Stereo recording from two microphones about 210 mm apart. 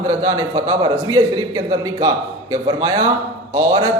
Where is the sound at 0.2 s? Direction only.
20° right (ahead or behind).